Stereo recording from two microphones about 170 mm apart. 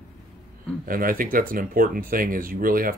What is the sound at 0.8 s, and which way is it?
Speech, 55° right (ahead or behind).